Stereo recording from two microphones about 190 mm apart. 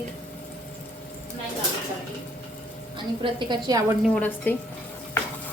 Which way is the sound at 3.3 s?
20° right (ahead or behind).